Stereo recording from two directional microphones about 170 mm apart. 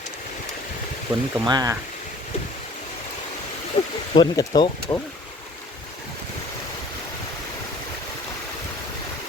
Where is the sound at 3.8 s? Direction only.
35° left (ahead or behind).